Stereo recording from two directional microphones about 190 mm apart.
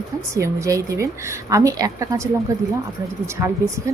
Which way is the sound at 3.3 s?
15° right (ahead or behind).